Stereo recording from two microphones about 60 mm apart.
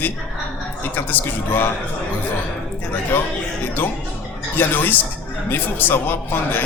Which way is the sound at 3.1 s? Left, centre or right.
Left.